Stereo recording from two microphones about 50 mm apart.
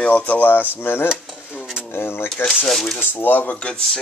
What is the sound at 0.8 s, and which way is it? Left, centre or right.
Speech, left.